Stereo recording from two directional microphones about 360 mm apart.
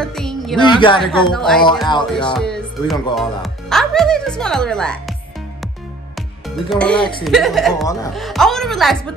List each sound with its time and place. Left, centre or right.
0.0 s music: centre
0.6 s speech: centre
1.0 s a woman's voice: centre
1.9 s speech: centre
2.3 s speech: centre
6.1 s music: centre
7.2 s a woman's voice: centre